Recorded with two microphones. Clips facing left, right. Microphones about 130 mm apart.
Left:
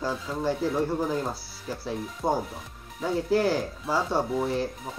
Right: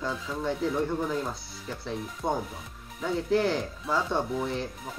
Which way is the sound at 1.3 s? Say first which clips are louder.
Left 3 dB; 5° left (ahead or behind).